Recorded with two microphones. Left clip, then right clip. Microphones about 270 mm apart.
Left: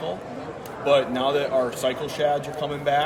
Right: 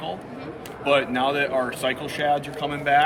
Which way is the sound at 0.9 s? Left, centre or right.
Centre.